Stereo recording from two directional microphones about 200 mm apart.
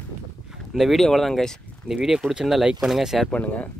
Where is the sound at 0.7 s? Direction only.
Centre (ahead or behind).